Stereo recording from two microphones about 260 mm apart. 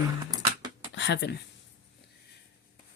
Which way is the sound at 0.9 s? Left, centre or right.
Left.